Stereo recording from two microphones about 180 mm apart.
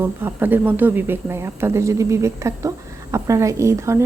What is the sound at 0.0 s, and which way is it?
Speech, 15° right (ahead or behind).